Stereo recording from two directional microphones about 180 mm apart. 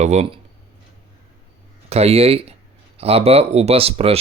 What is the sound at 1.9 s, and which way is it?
Speech, 35° right (ahead or behind).